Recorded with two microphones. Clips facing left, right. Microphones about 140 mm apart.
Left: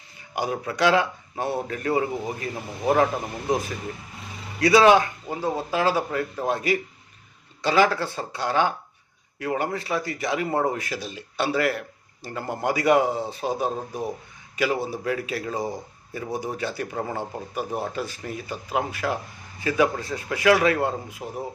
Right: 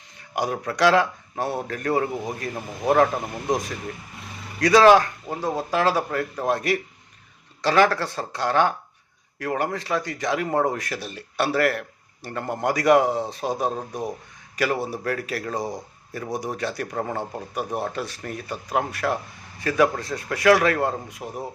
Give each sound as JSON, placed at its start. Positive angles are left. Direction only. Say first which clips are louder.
{"t": 0.3, "sound": "speech", "louder": "right 1 dB", "side_deg": 5}
{"t": 4.9, "sound": "speech", "louder": "right 2 dB", "side_deg": 0}
{"t": 7.9, "sound": "a man's voice", "louder": "right 1 dB", "side_deg": 0}